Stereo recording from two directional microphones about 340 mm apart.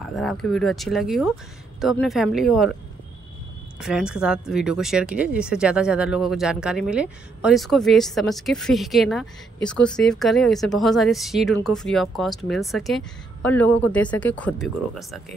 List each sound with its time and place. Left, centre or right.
0.0 s speech: centre
3.8 s speech: centre